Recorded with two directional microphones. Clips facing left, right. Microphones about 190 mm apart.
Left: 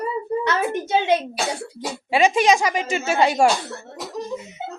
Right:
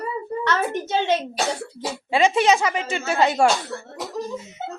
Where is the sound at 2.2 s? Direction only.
15° left (ahead or behind).